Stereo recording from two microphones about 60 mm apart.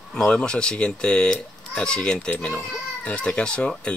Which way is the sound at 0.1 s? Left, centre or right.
Centre.